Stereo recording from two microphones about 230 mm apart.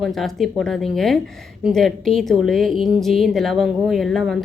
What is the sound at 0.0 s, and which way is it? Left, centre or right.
A woman's voice, centre.